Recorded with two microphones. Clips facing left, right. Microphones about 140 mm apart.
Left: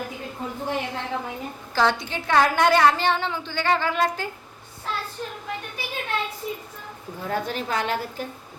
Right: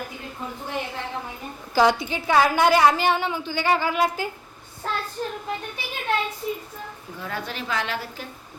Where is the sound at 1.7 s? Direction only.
10° right (ahead or behind).